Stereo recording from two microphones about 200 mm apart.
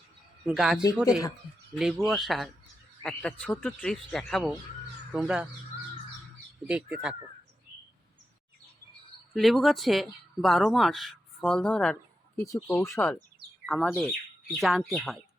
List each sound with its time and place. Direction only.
0.4 s speech: 5° right (ahead or behind)
6.7 s speech: 5° right (ahead or behind)
9.3 s speech: centre (ahead or behind)
13.7 s speech: centre (ahead or behind)